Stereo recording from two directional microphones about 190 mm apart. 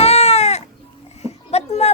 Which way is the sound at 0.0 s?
30° left (ahead or behind).